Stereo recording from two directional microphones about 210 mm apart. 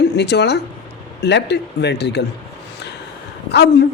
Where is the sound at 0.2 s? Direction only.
55° left (ahead or behind).